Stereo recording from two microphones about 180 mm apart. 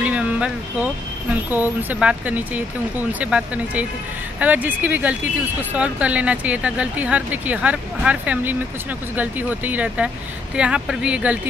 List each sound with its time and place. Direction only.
0.0 s vehicle: 5° right (ahead or behind)
1.3 s speech: 10° right (ahead or behind)